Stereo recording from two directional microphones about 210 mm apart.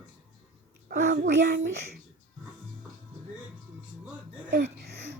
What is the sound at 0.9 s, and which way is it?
Speech, 40° right (ahead or behind).